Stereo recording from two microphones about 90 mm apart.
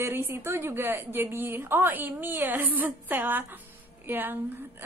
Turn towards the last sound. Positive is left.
turn(degrees=-20)  # may be behind; listen again after turning